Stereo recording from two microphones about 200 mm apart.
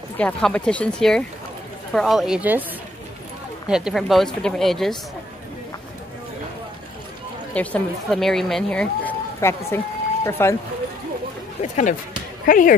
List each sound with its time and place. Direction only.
0.2 s speech: 5° left (ahead or behind)
3.6 s speech: 5° right (ahead or behind)
7.5 s speech: 5° left (ahead or behind)
11.6 s speech: 35° left (ahead or behind)